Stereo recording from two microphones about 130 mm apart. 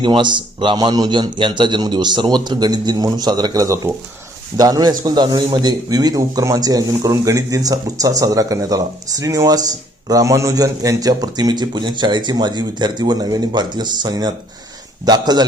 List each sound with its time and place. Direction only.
0.0 s a man's voice: 35° right (ahead or behind)